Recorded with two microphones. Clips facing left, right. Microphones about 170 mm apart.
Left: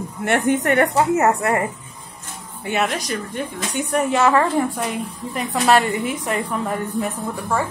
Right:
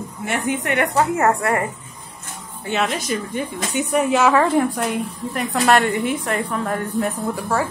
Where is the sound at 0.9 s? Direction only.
20° left (ahead or behind).